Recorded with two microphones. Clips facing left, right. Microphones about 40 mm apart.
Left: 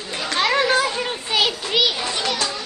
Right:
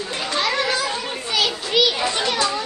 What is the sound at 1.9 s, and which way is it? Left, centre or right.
Speech, centre.